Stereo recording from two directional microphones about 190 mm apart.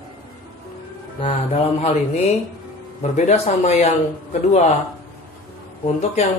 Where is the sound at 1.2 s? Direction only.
30° left (ahead or behind).